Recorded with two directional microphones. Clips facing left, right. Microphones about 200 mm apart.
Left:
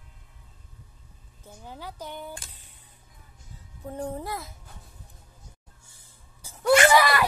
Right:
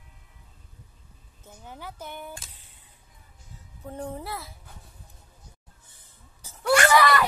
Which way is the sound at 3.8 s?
10° left (ahead or behind).